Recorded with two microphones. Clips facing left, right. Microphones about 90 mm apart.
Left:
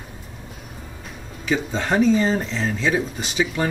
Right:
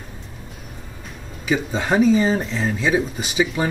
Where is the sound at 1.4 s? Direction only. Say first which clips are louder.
Right 1 dB; 10° right (ahead or behind).